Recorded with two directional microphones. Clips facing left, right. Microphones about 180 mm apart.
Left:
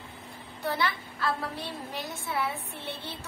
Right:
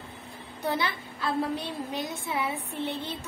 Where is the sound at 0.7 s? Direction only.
20° right (ahead or behind).